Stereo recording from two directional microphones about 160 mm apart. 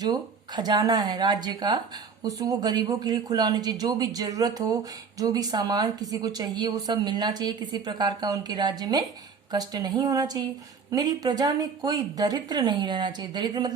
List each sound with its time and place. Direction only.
0.0 s speech: 25° right (ahead or behind)